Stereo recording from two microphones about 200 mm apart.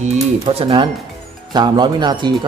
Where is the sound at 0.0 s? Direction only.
35° right (ahead or behind).